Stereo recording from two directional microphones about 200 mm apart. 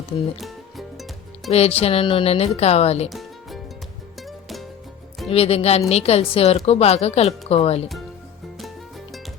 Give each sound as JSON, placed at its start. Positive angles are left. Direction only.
{"t": 0.3, "sound": "music", "side_deg": 0}
{"t": 1.5, "sound": "speech", "side_deg": 30}
{"t": 3.1, "sound": "music", "side_deg": 0}
{"t": 5.3, "sound": "speech", "side_deg": 30}